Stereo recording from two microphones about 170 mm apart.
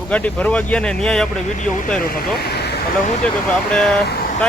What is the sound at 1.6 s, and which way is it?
Speech, 50° left (ahead or behind).